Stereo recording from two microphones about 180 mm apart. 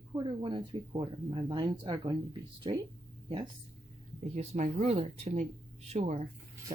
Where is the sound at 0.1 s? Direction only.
25° right (ahead or behind).